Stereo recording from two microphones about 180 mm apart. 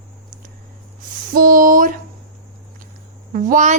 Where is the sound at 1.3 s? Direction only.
50° right (ahead or behind).